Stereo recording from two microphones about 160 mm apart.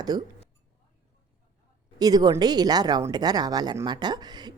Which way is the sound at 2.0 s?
25° right (ahead or behind).